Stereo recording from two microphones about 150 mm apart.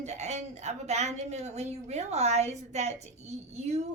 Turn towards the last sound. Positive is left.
turn(degrees=-50)  # may be behind; listen again after turning